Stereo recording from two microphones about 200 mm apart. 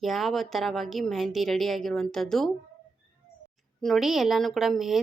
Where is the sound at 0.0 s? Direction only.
Centre (ahead or behind).